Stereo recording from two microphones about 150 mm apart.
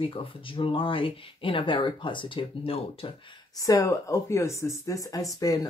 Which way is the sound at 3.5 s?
20° left (ahead or behind).